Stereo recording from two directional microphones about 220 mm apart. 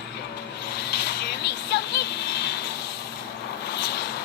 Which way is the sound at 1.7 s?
50° left (ahead or behind).